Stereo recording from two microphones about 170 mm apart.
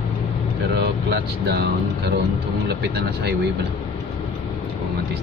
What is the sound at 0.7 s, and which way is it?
Speech, 75° right (ahead or behind).